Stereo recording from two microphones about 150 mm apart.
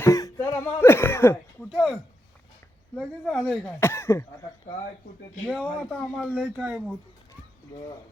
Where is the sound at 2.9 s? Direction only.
5° left (ahead or behind).